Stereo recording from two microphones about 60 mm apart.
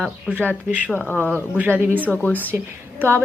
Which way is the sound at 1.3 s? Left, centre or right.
Right.